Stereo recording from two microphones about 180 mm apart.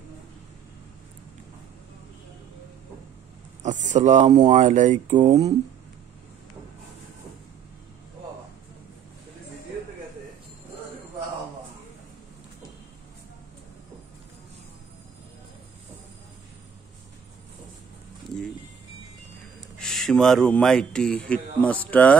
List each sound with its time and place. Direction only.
3.6 s speech: 40° right (ahead or behind)
19.8 s speech: 5° left (ahead or behind)